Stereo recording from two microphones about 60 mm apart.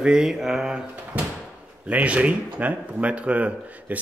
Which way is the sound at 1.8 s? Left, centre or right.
Right.